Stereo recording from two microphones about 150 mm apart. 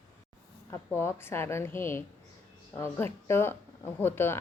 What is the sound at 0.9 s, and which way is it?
Speech, 15° left (ahead or behind).